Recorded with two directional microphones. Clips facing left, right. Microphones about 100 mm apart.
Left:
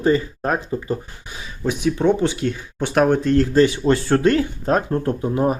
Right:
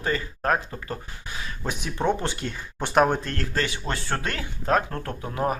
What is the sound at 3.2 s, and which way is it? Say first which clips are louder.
Speech: left 15 dB; 15° left (ahead or behind).